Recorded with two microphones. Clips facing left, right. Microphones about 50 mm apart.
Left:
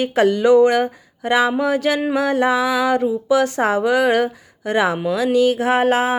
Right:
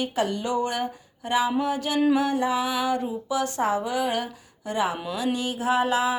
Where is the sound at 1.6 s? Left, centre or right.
Left.